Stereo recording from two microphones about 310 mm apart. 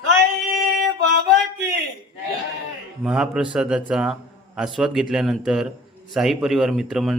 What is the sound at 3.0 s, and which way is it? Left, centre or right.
A man's voice, centre.